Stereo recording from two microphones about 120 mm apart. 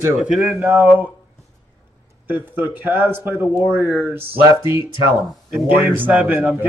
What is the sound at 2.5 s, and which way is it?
Speech, 15° right (ahead or behind).